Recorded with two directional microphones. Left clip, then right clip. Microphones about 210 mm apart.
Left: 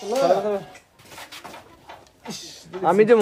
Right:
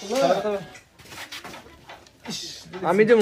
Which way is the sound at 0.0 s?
50° left (ahead or behind).